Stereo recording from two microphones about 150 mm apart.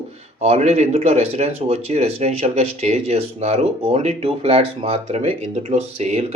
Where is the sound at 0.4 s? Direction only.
45° right (ahead or behind).